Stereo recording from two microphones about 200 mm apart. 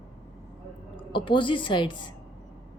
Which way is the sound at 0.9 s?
25° left (ahead or behind).